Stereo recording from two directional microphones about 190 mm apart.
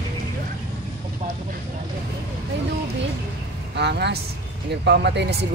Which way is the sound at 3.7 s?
60° right (ahead or behind).